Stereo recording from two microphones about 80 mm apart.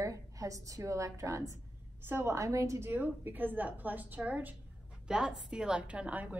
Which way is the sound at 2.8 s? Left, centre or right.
Right.